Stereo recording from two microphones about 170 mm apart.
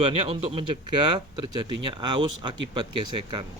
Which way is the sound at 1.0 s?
25° right (ahead or behind).